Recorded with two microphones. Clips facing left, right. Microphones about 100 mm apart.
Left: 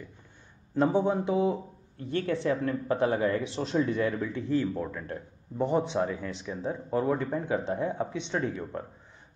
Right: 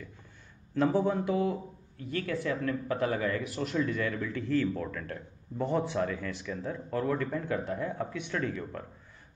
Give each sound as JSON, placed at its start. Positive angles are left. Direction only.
{"t": 0.7, "sound": "speech", "side_deg": 20}